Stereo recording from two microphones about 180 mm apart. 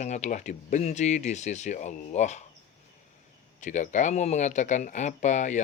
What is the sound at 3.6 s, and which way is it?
Speech, 45° left (ahead or behind).